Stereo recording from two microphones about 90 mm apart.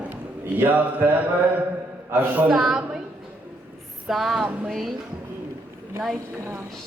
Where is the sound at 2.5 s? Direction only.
5° right (ahead or behind).